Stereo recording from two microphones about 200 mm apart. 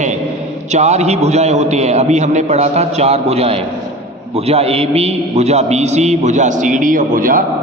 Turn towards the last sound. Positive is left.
turn(degrees=-45)  # may be behind; listen again after turning